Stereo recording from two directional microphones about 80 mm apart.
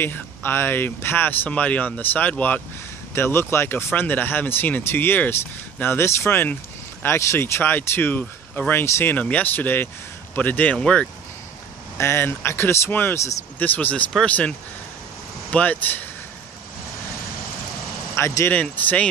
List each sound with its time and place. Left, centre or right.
0.0 s speech: left
7.2 s speech: left
8.8 s speech: left
9.1 s speech: centre
12.0 s speech: left; by 14.5 s centre
15.5 s speech: left
18.1 s speech: left
18.5 s speech: centre